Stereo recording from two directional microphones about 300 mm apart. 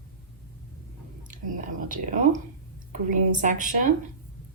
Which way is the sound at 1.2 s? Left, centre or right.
Right.